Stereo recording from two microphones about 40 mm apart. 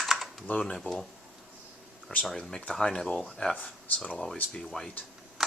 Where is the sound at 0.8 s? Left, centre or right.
Centre.